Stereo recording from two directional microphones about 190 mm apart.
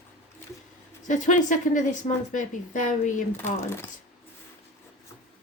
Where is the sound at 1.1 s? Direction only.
40° left (ahead or behind).